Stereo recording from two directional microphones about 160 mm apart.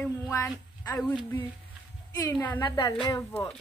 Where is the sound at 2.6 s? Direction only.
25° left (ahead or behind).